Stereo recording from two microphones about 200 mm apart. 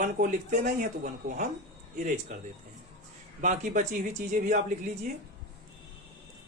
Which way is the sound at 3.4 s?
40° right (ahead or behind).